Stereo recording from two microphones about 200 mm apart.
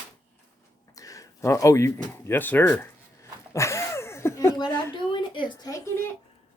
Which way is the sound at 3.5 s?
15° left (ahead or behind).